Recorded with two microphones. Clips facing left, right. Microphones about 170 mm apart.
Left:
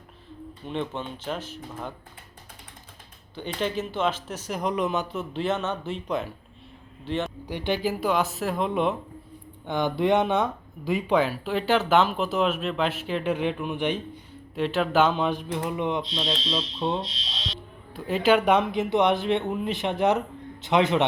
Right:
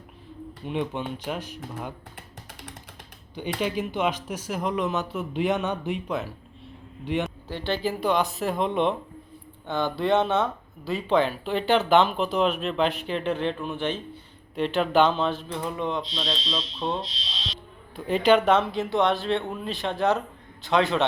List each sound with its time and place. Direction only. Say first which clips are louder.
0.6 s speech: right 2 dB; 10° right (ahead or behind)
3.3 s speech: right 1 dB; 10° right (ahead or behind)
5.3 s speech: right 2 dB; 15° right (ahead or behind)
7.4 s speech: left 1 dB; 15° left (ahead or behind)
9.6 s speech: left 1 dB; 15° left (ahead or behind)
14.5 s speech: right 1 dB; centre (ahead or behind)
17.9 s speech: right 1 dB; 5° left (ahead or behind); by 21.0 s 20° left (ahead or behind)